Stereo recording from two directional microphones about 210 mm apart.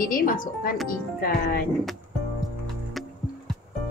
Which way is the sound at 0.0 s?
40° left (ahead or behind).